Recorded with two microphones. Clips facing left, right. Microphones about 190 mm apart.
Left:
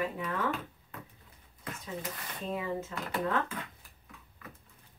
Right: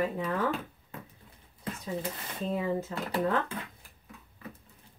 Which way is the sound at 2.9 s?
30° right (ahead or behind).